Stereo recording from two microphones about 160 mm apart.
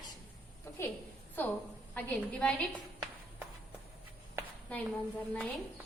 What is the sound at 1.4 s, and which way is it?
A woman's voice, 10° left (ahead or behind).